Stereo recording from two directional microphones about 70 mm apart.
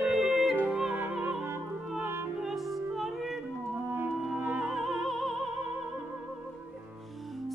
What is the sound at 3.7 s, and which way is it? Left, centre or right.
Music, right.